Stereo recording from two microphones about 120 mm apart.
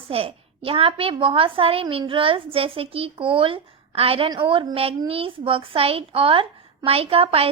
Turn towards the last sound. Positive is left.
turn(degrees=-50)  # may be behind; listen again after turning